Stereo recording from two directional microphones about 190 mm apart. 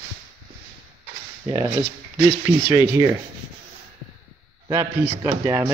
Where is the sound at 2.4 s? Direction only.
15° right (ahead or behind).